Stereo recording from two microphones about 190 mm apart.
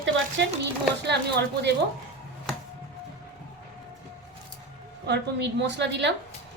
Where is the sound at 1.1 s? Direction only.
60° right (ahead or behind).